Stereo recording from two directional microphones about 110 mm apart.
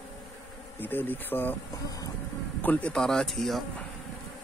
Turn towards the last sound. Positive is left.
turn(degrees=0)  # may be behind; listen again after turning